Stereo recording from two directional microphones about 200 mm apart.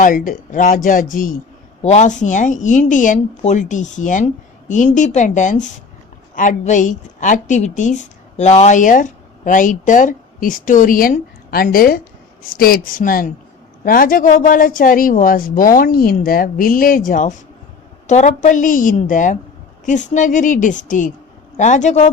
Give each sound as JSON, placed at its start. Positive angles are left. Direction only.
{"t": 0.0, "sound": "a woman's voice", "side_deg": 40}